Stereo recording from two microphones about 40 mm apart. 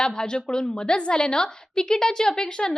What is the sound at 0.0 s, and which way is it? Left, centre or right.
A woman's voice, centre.